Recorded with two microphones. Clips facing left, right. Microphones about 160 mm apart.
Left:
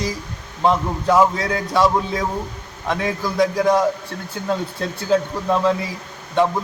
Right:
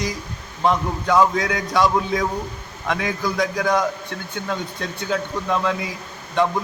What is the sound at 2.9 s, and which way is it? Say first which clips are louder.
A man's voice: left 2 dB; 30° left (ahead or behind).